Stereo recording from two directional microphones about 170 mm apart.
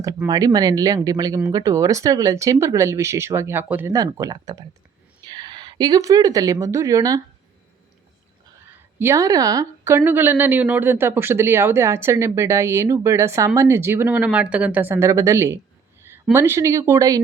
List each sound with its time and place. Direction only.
0.3 s speech: 20° right (ahead or behind)
9.0 s speech: 15° right (ahead or behind)